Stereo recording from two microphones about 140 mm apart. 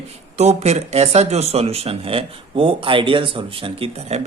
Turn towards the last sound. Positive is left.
turn(degrees=-40)  # may be behind; listen again after turning